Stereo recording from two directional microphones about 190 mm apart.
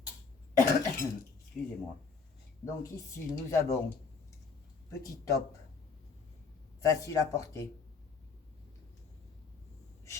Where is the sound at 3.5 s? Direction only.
15° left (ahead or behind).